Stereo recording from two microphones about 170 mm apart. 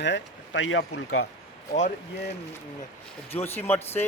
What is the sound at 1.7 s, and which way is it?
Speech, 45° left (ahead or behind).